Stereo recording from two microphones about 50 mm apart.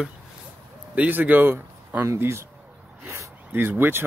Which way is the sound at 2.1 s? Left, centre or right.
Right.